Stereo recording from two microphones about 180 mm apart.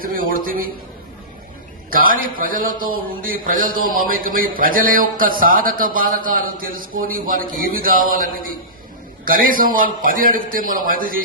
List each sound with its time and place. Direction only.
0.0 s speech: 50° right (ahead or behind)
1.9 s speech: 50° right (ahead or behind)